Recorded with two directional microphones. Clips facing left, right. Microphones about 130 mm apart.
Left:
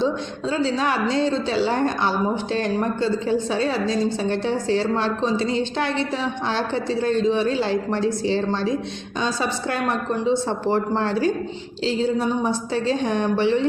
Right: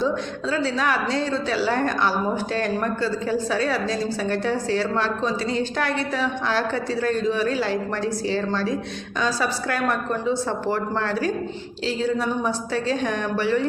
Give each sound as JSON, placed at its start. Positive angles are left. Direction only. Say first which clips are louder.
{"t": 0.0, "sound": "a woman's voice", "louder": "left 1 dB", "side_deg": 25}